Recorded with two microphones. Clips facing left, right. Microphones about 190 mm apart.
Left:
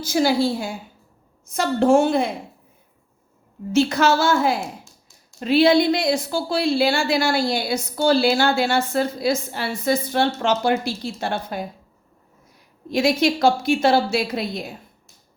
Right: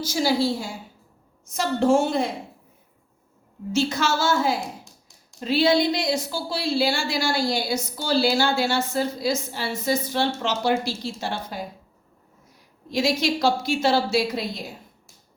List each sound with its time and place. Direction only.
0.0 s speech: 55° left (ahead or behind)
3.7 s speech: 60° left (ahead or behind)
4.6 s a sound: 15° right (ahead or behind)
5.4 s speech: 55° left (ahead or behind)
12.9 s speech: 55° left (ahead or behind)